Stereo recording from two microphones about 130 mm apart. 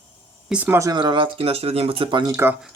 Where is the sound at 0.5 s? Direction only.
10° right (ahead or behind).